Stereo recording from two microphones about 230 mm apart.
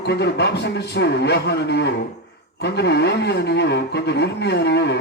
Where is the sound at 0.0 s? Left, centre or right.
Left.